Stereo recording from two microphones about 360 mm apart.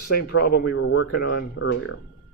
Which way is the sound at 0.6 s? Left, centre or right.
Left.